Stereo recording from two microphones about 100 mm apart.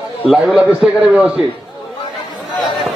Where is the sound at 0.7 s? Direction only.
5° right (ahead or behind).